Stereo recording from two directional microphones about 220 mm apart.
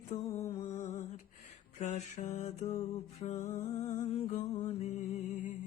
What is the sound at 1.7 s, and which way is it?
Music, 30° left (ahead or behind).